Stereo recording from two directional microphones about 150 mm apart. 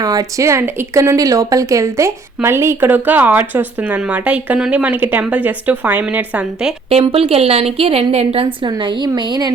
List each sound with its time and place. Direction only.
0.0 s speech: 25° right (ahead or behind); by 6.7 s 5° right (ahead or behind)
6.9 s a woman's voice: 40° right (ahead or behind)